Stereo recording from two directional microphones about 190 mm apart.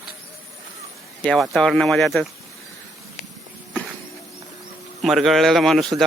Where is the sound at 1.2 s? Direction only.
5° left (ahead or behind).